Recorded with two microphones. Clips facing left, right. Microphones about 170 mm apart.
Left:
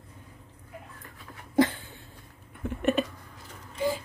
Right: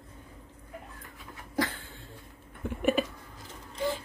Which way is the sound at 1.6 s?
20° left (ahead or behind).